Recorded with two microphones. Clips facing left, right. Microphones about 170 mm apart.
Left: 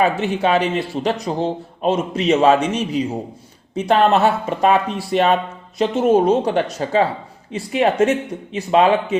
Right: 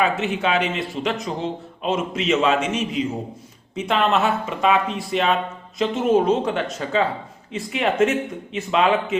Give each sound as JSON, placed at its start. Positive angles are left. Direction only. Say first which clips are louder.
{"t": 0.0, "sound": "a man's voice", "louder": "left 4 dB", "side_deg": 35}